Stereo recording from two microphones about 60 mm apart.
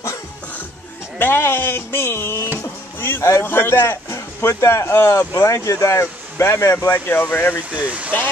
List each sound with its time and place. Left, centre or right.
1.1 s speech: left
2.6 s music: left
3.4 s a man's voice: left
6.9 s speech: left
7.7 s speech: right